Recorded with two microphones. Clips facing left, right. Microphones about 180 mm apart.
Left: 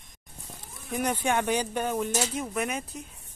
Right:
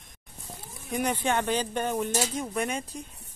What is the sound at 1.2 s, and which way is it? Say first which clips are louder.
Speech: left 1 dB; 10° left (ahead or behind).